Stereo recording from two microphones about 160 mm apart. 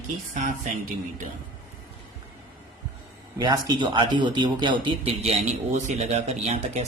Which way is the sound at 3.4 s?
25° right (ahead or behind).